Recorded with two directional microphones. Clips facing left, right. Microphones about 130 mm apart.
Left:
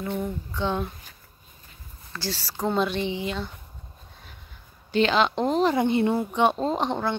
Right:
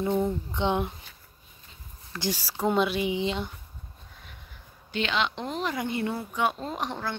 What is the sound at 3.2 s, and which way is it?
Speech, 25° right (ahead or behind).